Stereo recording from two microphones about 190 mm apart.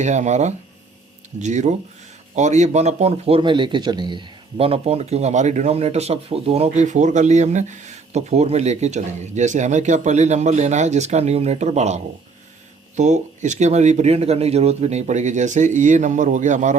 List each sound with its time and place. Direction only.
0.0 s speech: 40° right (ahead or behind)